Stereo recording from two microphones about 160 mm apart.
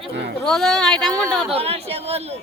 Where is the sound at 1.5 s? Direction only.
40° right (ahead or behind).